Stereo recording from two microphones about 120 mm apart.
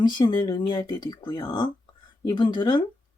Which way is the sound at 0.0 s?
35° left (ahead or behind).